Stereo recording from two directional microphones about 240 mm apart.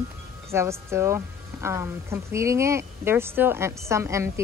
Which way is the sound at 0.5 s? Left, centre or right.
Centre.